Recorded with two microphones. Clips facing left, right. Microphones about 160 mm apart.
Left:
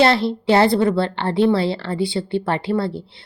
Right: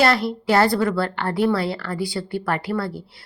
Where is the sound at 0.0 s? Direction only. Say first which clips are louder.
Left 3 dB; 25° left (ahead or behind).